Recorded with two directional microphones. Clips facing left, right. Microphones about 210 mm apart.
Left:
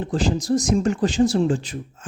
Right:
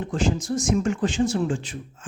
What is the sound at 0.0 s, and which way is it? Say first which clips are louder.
Speech: left 2 dB; 35° left (ahead or behind).